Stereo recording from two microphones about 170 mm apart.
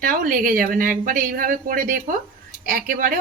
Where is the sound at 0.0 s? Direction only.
55° right (ahead or behind).